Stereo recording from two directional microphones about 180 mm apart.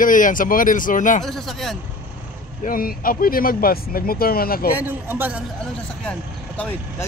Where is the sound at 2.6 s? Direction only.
55° left (ahead or behind).